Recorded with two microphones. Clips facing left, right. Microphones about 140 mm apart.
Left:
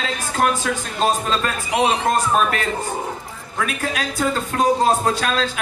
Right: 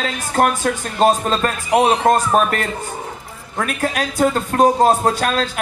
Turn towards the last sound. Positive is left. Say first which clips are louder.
# right 2 dB
turn(degrees=-45)  # may be behind; listen again after turning